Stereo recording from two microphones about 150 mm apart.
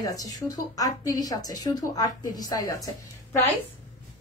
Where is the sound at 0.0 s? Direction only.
25° left (ahead or behind).